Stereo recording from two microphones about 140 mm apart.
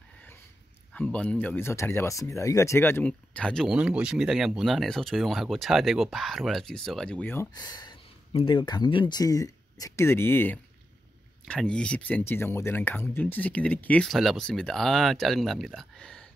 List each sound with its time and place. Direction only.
0.9 s speech: 10° left (ahead or behind)
3.7 s speech: 5° right (ahead or behind); by 7.4 s 10° left (ahead or behind)
7.5 s speech: 30° left (ahead or behind); by 16.3 s 5° left (ahead or behind)